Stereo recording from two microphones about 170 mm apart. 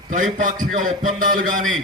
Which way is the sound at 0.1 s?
50° right (ahead or behind).